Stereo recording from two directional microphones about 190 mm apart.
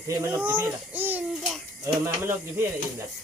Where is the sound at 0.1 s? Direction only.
15° right (ahead or behind).